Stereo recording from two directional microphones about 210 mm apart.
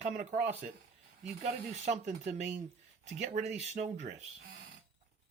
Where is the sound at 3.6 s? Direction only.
30° right (ahead or behind).